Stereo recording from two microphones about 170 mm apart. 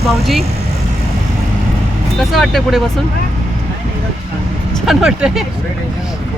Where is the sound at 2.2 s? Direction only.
Centre (ahead or behind).